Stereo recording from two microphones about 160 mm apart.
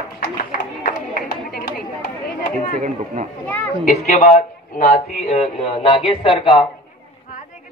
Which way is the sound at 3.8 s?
50° left (ahead or behind).